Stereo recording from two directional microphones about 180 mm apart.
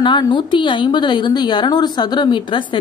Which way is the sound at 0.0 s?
25° left (ahead or behind).